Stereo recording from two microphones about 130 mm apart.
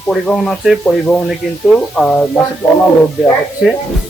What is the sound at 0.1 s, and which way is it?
A man's voice, 5° left (ahead or behind).